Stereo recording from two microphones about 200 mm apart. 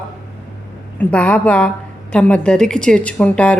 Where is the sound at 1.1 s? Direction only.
5° left (ahead or behind).